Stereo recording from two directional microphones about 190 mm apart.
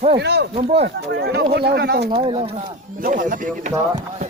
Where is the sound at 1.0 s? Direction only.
60° right (ahead or behind).